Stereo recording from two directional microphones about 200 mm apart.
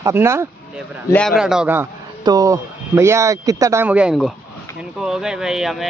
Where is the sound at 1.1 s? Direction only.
Centre (ahead or behind).